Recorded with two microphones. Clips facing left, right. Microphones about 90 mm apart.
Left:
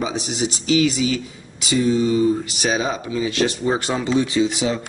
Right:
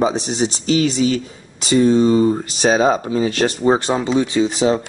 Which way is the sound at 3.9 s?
20° right (ahead or behind).